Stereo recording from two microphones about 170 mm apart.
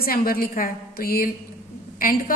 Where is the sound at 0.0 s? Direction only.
60° left (ahead or behind).